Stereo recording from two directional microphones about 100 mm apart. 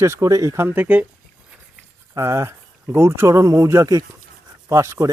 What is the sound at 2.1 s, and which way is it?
Speech, 30° right (ahead or behind).